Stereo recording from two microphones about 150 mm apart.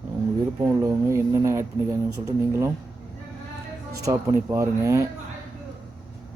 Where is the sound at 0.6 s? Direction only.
20° right (ahead or behind).